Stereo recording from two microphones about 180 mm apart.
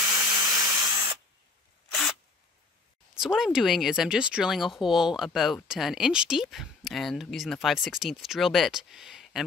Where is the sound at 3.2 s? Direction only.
Centre (ahead or behind).